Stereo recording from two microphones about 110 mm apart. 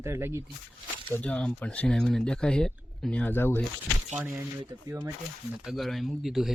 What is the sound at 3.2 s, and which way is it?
Speech, 20° left (ahead or behind).